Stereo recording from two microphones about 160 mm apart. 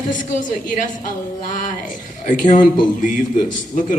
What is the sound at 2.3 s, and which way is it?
Speech, 50° left (ahead or behind).